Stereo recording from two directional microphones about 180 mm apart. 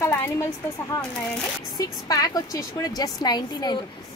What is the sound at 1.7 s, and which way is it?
A woman's voice, 20° left (ahead or behind).